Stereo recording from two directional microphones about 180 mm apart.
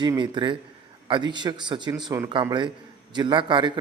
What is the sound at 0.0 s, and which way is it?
A man's voice, 25° right (ahead or behind).